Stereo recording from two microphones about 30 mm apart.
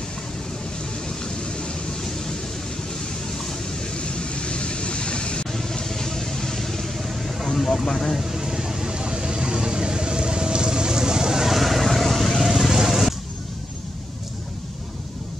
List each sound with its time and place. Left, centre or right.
1.0 s vehicle: left
2.0 s vehicle: centre
3.9 s vehicle: left
5.5 s vehicle: centre
7.0 s a sound: centre
7.5 s speech: centre
8.2 s a sound: centre
8.9 s vehicle: right
11.5 s vehicle: centre